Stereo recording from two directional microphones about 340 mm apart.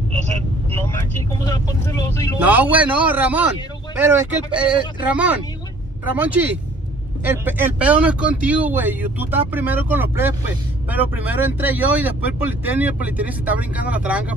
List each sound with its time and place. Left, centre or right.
1.4 s speech: centre
2.4 s speech: centre